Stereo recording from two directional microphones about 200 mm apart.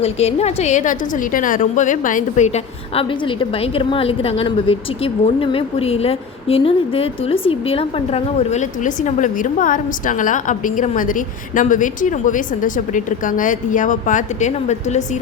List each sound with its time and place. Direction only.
0.0 s a woman's voice: 30° left (ahead or behind)
2.9 s a woman's voice: 30° left (ahead or behind)